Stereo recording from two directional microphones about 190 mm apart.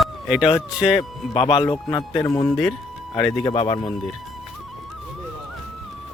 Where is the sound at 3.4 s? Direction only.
25° left (ahead or behind).